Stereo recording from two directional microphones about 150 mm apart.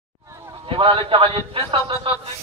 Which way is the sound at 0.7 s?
35° right (ahead or behind).